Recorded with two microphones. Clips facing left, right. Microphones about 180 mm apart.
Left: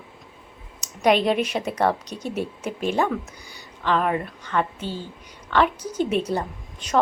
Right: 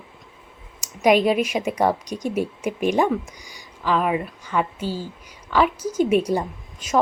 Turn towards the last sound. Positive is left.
turn(degrees=-10)  # may be behind; listen again after turning